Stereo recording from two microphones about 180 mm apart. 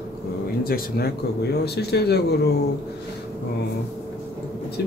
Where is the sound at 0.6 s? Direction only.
55° left (ahead or behind).